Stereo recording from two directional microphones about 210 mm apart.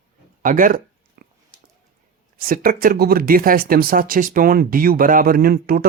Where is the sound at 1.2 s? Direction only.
50° right (ahead or behind).